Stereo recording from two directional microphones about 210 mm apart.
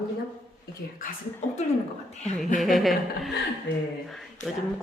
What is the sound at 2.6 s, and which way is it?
A woman's voice, centre (ahead or behind).